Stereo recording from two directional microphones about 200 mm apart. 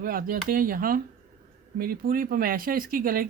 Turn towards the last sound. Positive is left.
turn(degrees=-45)  # may be behind; listen again after turning